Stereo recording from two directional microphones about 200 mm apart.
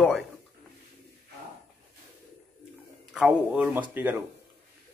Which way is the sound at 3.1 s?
5° right (ahead or behind).